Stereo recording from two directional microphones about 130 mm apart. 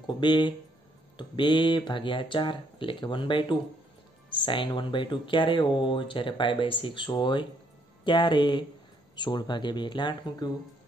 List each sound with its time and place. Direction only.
0.0 s speech: 35° left (ahead or behind)